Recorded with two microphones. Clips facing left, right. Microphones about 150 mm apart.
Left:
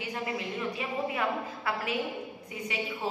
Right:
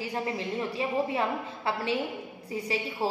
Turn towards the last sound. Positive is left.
turn(degrees=-35)  # may be behind; listen again after turning